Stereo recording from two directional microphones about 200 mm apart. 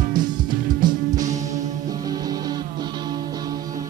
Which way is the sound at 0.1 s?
20° right (ahead or behind).